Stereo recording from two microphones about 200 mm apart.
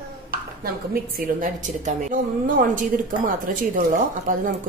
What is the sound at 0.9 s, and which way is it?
A woman's voice, 45° right (ahead or behind).